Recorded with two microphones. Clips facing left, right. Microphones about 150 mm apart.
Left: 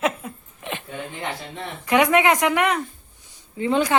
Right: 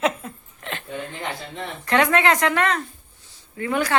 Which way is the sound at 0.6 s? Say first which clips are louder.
Left 2 dB; 15° left (ahead or behind).